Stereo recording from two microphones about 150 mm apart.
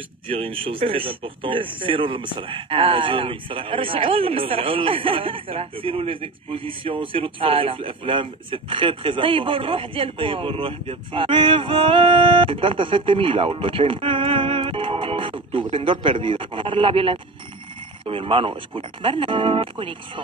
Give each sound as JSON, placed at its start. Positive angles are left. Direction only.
{"t": 0.4, "sound": "a man's voice", "side_deg": -35}